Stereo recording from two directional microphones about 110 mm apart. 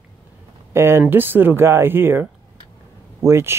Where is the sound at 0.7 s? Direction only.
20° right (ahead or behind).